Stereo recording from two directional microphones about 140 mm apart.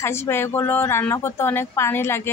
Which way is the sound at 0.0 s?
20° left (ahead or behind).